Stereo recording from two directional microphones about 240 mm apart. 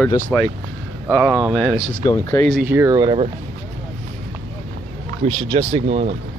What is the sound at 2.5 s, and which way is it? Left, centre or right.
Speech, centre.